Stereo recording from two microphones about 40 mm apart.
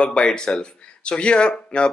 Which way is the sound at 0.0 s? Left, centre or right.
Left.